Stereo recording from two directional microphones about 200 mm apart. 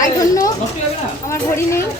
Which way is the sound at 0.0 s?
15° left (ahead or behind).